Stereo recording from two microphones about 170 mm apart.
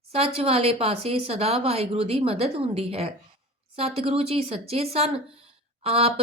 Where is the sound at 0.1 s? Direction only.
35° right (ahead or behind).